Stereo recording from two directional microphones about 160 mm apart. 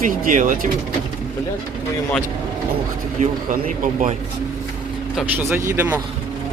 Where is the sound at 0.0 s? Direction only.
55° right (ahead or behind).